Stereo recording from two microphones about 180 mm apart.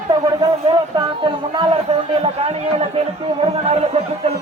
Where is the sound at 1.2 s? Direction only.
25° right (ahead or behind).